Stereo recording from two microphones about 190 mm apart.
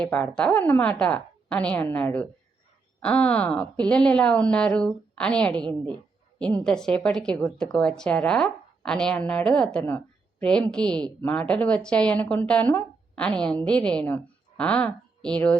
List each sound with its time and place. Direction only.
0.0 s a woman's voice: 5° left (ahead or behind)
5.6 s a woman's voice: 25° right (ahead or behind)
6.4 s speech: 5° left (ahead or behind)